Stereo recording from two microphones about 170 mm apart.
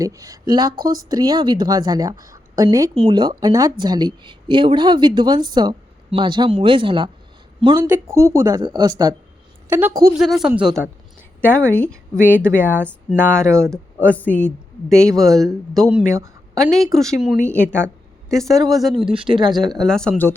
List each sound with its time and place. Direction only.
0.0 s a woman's voice: 20° right (ahead or behind)
7.8 s a woman's voice: 15° right (ahead or behind)
9.6 s a woman's voice: 10° right (ahead or behind)
10.2 s speech: centre (ahead or behind)
11.7 s a woman's voice: 10° left (ahead or behind)
12.1 s speech: 10° right (ahead or behind)
13.2 s speech: 5° left (ahead or behind)
13.5 s speech: 15° right (ahead or behind)
14.1 s a woman's voice: 10° left (ahead or behind)
17.6 s speech: 15° right (ahead or behind)
18.3 s speech: centre (ahead or behind)
19.1 s a woman's voice: 30° right (ahead or behind)
19.8 s speech: 5° left (ahead or behind)